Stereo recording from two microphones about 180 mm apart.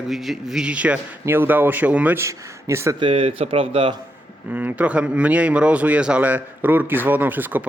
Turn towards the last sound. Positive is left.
turn(degrees=-10)  # may be behind; listen again after turning